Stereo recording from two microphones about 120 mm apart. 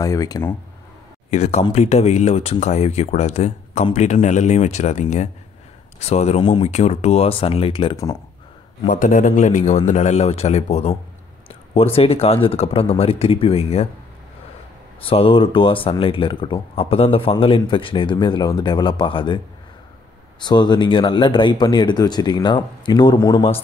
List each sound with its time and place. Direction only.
0.0 s speech: 30° left (ahead or behind)
1.3 s speech: 65° left (ahead or behind)
5.9 s speech: 65° left (ahead or behind)
8.8 s speech: 90° left; by 11.0 s 65° left (ahead or behind)
11.4 s speech: 50° left (ahead or behind)
15.0 s speech: 50° left (ahead or behind)